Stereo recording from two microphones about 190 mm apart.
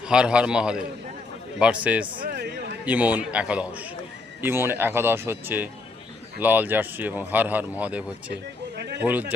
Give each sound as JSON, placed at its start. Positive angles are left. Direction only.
{"t": 0.1, "sound": "a man's voice", "side_deg": -5}
{"t": 2.2, "sound": "a sound", "side_deg": -60}
{"t": 2.8, "sound": "a man's voice", "side_deg": -10}